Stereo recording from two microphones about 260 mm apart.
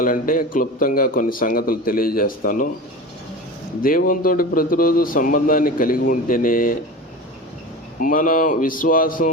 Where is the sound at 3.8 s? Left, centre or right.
Left.